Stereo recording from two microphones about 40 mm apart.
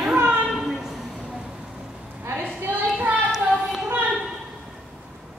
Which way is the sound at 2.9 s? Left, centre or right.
Right.